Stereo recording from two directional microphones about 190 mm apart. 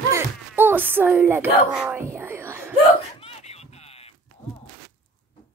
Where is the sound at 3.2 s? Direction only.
30° left (ahead or behind).